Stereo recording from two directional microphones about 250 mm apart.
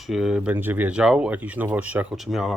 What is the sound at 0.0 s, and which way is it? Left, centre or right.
Speech, centre.